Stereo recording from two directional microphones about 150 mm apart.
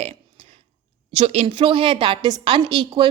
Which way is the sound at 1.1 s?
45° right (ahead or behind).